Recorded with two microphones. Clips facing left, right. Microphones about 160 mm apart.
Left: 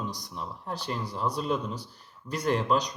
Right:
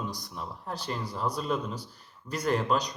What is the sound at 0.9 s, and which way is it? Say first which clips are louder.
Speech: left 1 dB; centre (ahead or behind).